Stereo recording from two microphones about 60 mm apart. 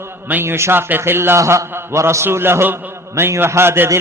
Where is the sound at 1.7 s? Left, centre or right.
Right.